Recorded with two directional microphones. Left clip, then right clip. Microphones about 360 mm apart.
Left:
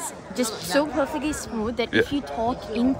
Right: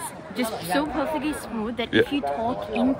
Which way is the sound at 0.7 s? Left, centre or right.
Left.